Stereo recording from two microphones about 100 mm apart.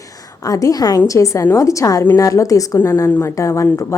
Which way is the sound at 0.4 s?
35° left (ahead or behind).